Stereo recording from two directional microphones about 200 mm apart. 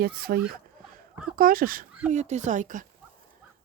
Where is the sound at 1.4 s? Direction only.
45° right (ahead or behind).